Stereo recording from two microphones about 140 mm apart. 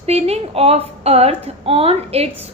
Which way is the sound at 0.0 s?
45° right (ahead or behind).